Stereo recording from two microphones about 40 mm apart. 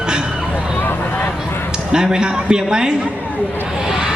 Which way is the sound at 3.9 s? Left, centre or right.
Centre.